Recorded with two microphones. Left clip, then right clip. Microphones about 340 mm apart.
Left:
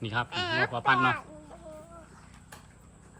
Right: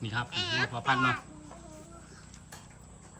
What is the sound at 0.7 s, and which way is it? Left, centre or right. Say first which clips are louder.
Speech: left 5 dB; centre.